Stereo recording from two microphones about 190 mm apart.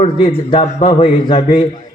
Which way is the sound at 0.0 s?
35° left (ahead or behind).